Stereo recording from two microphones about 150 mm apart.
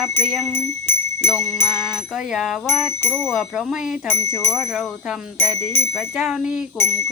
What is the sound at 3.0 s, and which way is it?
Speech, 15° left (ahead or behind).